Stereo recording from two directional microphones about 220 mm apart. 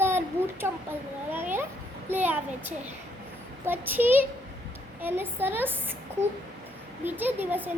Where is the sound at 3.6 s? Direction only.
10° right (ahead or behind).